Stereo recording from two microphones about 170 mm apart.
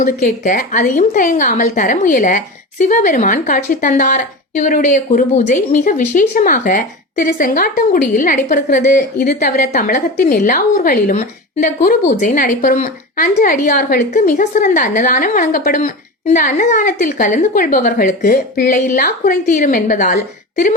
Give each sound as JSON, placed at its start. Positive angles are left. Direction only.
{"t": 0.0, "sound": "a woman's voice", "side_deg": 50}